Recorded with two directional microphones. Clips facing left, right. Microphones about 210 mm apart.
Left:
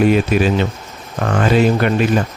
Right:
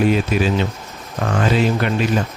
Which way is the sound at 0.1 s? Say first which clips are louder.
Left 3 dB; 60° left (ahead or behind).